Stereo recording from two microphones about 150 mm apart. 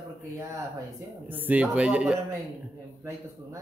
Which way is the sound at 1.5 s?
10° right (ahead or behind).